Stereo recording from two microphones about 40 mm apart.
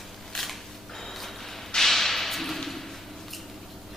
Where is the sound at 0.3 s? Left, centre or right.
Centre.